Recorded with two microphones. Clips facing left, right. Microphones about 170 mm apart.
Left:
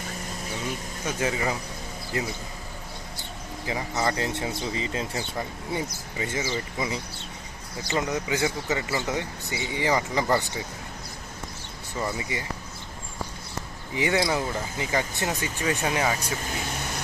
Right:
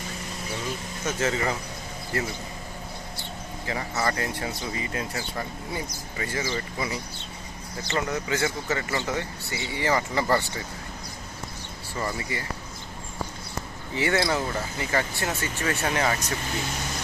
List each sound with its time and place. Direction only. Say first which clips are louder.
1.0 s speech: right 1 dB; 15° left (ahead or behind)
3.7 s speech: left 1 dB; 15° left (ahead or behind)
11.9 s speech: left 1 dB; 15° left (ahead or behind)
13.9 s speech: even; 15° left (ahead or behind)